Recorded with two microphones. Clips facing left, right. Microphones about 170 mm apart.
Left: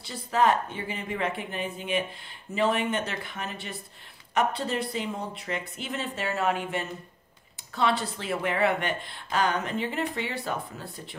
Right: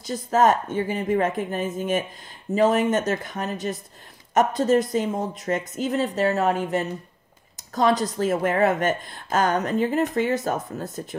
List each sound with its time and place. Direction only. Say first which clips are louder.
0.0 s a woman's voice: right 5 dB; 45° right (ahead or behind)